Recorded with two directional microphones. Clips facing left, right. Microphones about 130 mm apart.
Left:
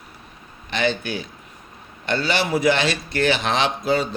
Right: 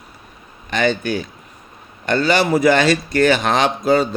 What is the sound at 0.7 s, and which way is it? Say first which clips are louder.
A man's voice: right 4 dB; 45° right (ahead or behind).